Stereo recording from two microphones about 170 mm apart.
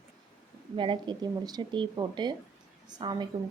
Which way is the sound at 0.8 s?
25° right (ahead or behind).